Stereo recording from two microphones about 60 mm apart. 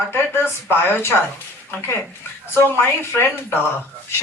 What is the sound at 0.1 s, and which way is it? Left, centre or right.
Speech, left.